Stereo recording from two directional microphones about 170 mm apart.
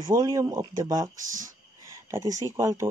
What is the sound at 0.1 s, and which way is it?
Speech, 20° right (ahead or behind).